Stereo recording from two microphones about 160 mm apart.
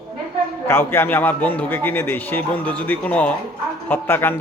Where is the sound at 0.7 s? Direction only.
15° left (ahead or behind).